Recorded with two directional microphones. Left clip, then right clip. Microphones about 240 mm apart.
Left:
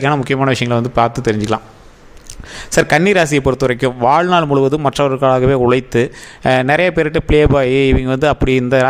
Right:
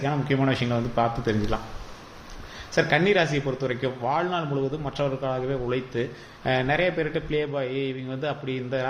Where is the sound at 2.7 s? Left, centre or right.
Left.